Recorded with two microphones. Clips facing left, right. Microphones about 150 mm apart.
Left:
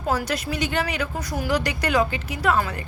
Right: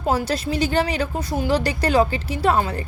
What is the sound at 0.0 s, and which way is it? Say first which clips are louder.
A woman's voice: right 3 dB; 25° right (ahead or behind).